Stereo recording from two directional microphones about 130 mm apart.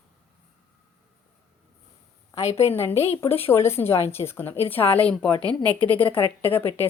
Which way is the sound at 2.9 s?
50° left (ahead or behind).